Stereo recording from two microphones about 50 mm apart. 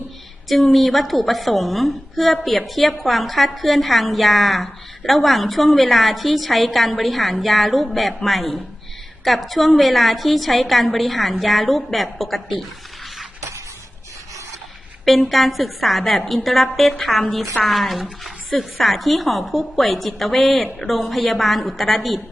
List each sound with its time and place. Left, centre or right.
0.4 s a woman's voice: centre
15.0 s a woman's voice: centre